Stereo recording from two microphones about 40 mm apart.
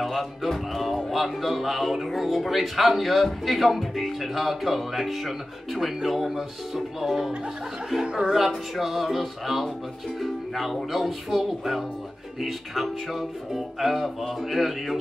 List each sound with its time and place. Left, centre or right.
0.0 s speech: centre
8.0 s speech: centre
8.7 s speech: centre